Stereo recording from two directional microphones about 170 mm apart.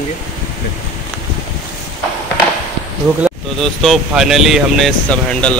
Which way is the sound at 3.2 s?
Centre (ahead or behind).